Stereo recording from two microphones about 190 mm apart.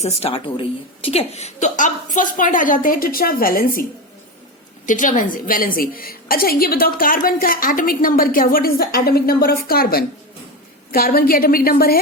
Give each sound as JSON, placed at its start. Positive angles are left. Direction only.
{"t": 0.0, "sound": "a woman's voice", "side_deg": 30}
{"t": 4.9, "sound": "a woman's voice", "side_deg": 45}